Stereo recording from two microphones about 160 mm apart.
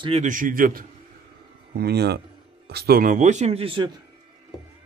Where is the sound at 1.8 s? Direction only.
90° right.